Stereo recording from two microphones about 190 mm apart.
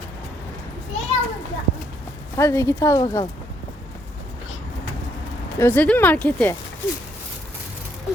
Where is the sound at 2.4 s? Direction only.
15° left (ahead or behind).